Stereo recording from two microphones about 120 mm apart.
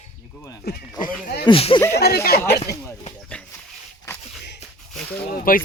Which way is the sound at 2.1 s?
20° left (ahead or behind).